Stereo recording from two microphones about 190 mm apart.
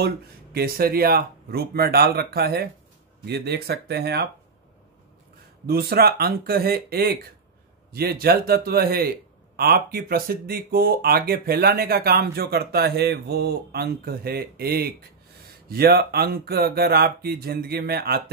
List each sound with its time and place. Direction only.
0.0 s speech: 55° right (ahead or behind)
5.7 s speech: 55° right (ahead or behind)